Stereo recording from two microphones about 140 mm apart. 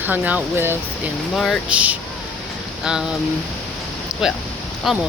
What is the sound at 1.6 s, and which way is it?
Speech, 10° right (ahead or behind).